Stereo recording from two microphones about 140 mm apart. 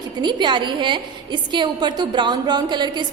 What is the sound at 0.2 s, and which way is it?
A woman's voice, 30° right (ahead or behind).